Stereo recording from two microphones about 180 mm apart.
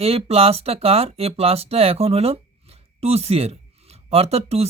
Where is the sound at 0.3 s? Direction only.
35° right (ahead or behind).